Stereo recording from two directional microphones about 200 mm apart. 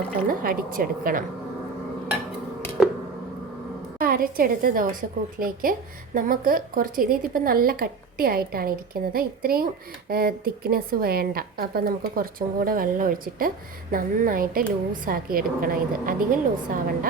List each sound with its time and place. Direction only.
0.3 s speech: 45° right (ahead or behind)
3.9 s speech: 45° right (ahead or behind)